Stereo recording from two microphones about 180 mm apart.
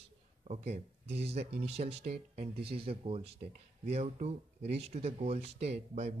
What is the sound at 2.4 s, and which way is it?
Speech, 60° right (ahead or behind).